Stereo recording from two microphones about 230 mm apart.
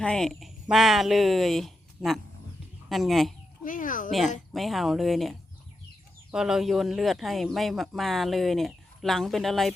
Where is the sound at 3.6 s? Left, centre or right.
Left.